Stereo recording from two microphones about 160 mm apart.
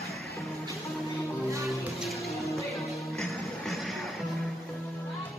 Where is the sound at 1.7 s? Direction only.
Centre (ahead or behind).